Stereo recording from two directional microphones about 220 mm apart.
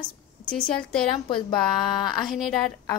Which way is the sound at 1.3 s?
20° left (ahead or behind).